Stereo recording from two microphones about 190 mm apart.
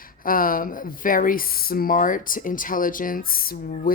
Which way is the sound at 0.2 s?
45° left (ahead or behind).